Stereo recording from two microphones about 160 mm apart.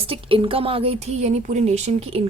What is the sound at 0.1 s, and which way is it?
A woman's voice, 35° right (ahead or behind).